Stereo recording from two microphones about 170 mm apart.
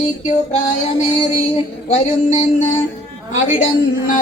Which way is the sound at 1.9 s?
40° left (ahead or behind).